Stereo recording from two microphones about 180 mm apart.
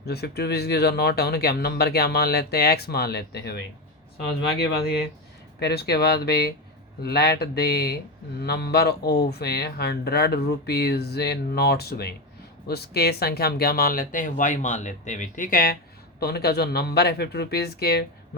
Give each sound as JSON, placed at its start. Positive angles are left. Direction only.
{"t": 0.0, "sound": "speech", "side_deg": 65}